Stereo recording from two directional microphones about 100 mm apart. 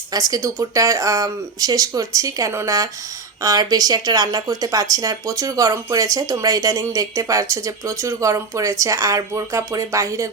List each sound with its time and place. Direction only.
0.1 s speech: 40° right (ahead or behind)